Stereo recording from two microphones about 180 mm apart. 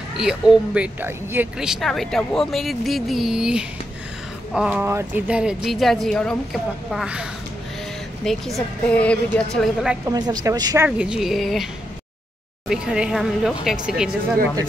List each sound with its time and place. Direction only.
0.2 s speech: 5° right (ahead or behind)
10.0 s speech: 20° right (ahead or behind)
10.9 s speech: 5° right (ahead or behind)
12.6 s speech: 5° right (ahead or behind)